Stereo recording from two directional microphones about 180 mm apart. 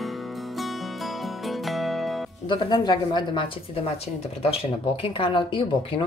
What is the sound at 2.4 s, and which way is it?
Speech, 25° left (ahead or behind).